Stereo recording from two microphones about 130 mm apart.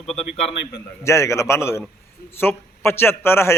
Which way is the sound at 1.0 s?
20° left (ahead or behind).